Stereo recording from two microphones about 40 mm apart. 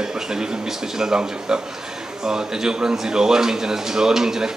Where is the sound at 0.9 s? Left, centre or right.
Centre.